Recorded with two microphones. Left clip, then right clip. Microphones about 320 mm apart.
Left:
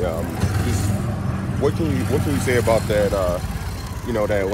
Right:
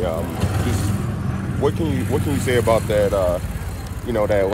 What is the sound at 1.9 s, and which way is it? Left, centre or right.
Speech, centre.